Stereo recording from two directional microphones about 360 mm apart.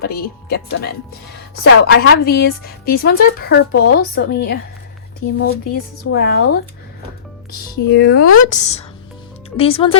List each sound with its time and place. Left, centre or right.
0.0 s a woman's voice: left
7.9 s a woman's voice: left
8.4 s a woman's voice: centre